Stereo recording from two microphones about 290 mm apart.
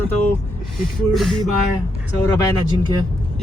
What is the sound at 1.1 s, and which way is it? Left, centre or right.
Speech, centre.